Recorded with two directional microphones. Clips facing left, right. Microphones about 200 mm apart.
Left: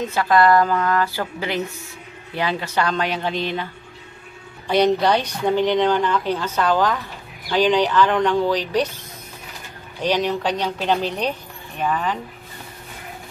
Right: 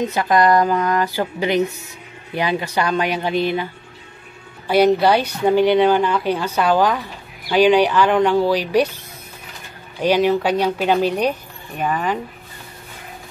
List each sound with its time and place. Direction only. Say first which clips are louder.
0.0 s a woman's voice: right 1 dB; 20° right (ahead or behind)
4.6 s a woman's voice: right 3 dB; 5° right (ahead or behind)
10.0 s a woman's voice: right 5 dB; 5° right (ahead or behind)